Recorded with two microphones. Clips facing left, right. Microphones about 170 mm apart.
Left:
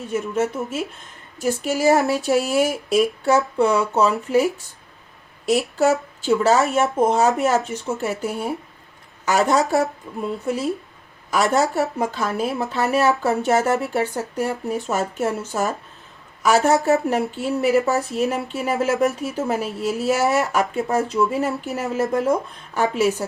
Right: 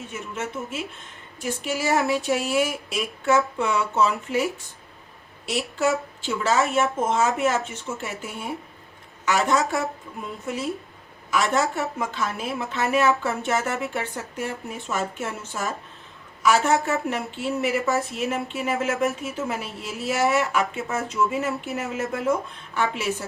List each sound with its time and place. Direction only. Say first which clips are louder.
1.4 s speech: left 6 dB; 40° left (ahead or behind)